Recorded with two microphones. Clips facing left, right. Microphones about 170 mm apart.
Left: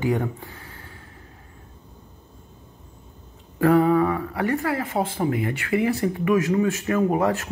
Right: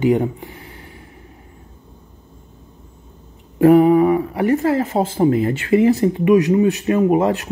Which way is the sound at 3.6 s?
20° right (ahead or behind).